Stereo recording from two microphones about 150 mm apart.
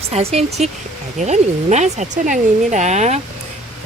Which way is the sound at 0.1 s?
45° right (ahead or behind).